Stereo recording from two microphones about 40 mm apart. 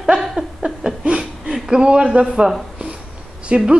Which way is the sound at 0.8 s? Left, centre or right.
Right.